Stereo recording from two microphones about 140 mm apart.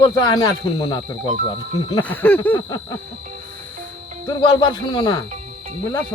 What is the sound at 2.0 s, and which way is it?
Speech, 10° left (ahead or behind).